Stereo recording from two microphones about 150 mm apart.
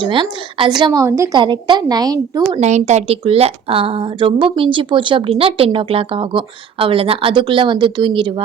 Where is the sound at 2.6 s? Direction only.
50° right (ahead or behind).